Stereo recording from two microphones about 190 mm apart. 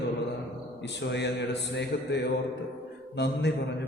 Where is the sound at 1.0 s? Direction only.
65° left (ahead or behind).